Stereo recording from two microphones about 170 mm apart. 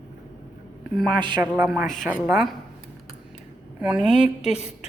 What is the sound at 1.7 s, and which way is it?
Speech, centre (ahead or behind).